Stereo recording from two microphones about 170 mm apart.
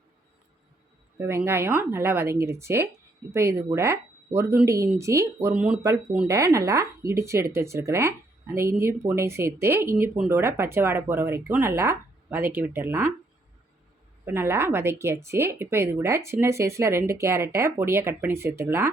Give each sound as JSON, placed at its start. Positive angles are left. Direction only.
{"t": 1.2, "sound": "speech", "side_deg": -15}
{"t": 6.2, "sound": "speech", "side_deg": -20}
{"t": 14.3, "sound": "speech", "side_deg": -15}